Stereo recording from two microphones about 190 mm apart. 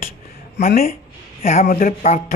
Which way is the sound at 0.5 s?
50° left (ahead or behind).